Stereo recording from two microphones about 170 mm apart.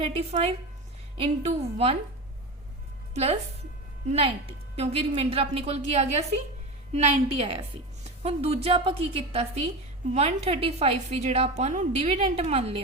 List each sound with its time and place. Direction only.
0.0 s a woman's voice: 35° right (ahead or behind)
4.0 s a woman's voice: 35° right (ahead or behind)